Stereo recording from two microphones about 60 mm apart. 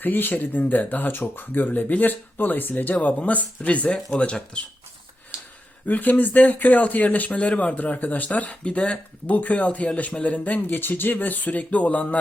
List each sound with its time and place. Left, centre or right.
0.0 s speech: left; by 4.6 s centre
5.8 s speech: left